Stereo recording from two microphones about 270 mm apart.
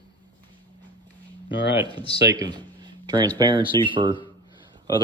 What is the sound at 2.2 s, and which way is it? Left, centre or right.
Speech, centre.